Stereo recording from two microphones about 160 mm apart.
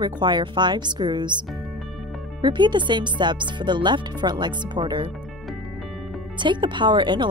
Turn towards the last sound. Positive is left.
turn(degrees=-30)  # may be behind; listen again after turning